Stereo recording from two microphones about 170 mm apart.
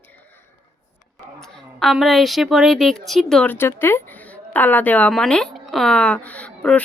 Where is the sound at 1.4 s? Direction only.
5° left (ahead or behind).